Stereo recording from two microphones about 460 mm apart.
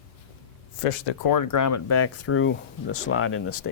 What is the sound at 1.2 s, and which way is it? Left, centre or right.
Speech, left.